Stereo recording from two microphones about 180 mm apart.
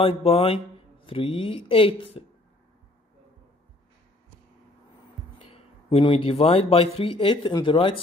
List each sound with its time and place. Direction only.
0.0 s speech: 30° left (ahead or behind)
5.5 s speech: 30° left (ahead or behind)